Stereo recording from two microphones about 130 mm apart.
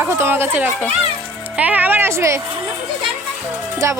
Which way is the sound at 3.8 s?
25° right (ahead or behind).